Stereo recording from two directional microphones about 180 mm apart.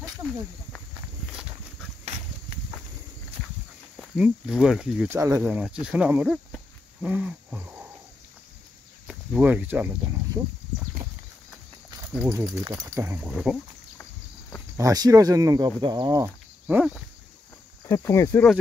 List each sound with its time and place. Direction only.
3.9 s speech: 5° right (ahead or behind)
9.0 s speech: 5° right (ahead or behind)
12.3 s speech: 20° right (ahead or behind)
14.8 s speech: 20° right (ahead or behind)
16.6 s a sound: 5° right (ahead or behind)
17.8 s speech: 15° left (ahead or behind)